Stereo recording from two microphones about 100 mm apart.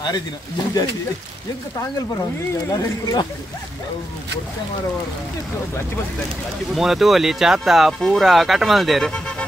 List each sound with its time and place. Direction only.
2.7 s speech: 40° left (ahead or behind)
6.7 s speech: 5° right (ahead or behind)